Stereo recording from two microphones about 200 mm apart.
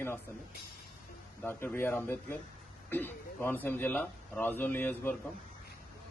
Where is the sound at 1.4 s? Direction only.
10° left (ahead or behind).